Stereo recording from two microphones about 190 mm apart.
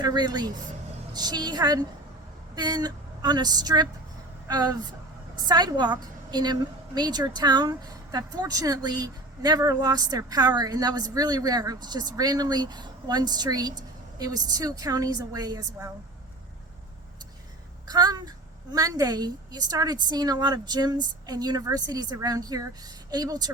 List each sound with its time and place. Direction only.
0.0 s a woman's voice: 20° right (ahead or behind)
17.8 s a woman's voice: 20° right (ahead or behind)